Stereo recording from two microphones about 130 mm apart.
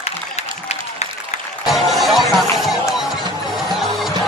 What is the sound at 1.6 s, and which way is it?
Music, centre (ahead or behind).